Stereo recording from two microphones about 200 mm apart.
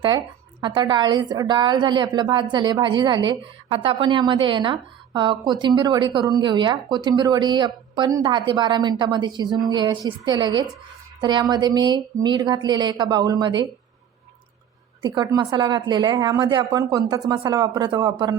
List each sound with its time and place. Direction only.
0.6 s a woman's voice: 25° right (ahead or behind)
15.0 s a woman's voice: 20° right (ahead or behind)